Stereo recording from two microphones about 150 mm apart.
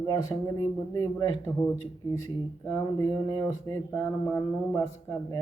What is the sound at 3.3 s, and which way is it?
Speech, 20° left (ahead or behind).